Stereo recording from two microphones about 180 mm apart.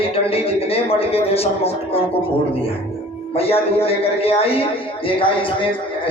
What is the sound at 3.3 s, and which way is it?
Speech, 35° left (ahead or behind).